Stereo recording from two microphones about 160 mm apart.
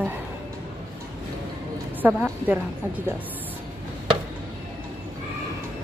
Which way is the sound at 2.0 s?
10° right (ahead or behind).